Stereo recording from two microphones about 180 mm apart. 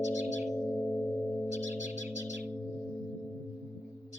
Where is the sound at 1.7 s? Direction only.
40° left (ahead or behind).